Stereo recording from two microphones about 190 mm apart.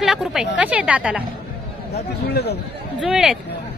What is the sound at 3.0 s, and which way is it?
Speech, centre (ahead or behind).